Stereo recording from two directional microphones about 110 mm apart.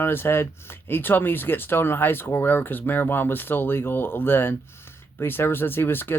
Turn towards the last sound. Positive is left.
turn(degrees=20)  # may be behind; listen again after turning